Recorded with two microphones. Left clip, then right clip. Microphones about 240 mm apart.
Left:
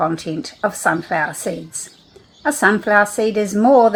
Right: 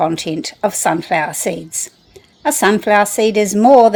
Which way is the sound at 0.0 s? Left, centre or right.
Right.